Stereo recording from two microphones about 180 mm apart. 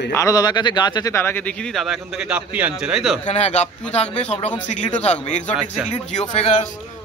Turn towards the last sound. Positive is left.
turn(degrees=35)  # may be behind; listen again after turning